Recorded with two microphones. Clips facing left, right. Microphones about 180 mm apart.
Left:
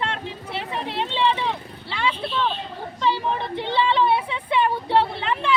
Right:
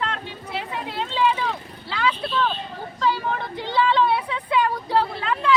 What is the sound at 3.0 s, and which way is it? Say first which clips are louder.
Vehicle: left 1 dB; 25° left (ahead or behind).